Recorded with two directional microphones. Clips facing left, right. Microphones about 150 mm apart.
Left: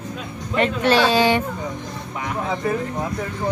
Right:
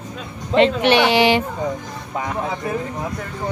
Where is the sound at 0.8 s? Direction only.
75° right (ahead or behind).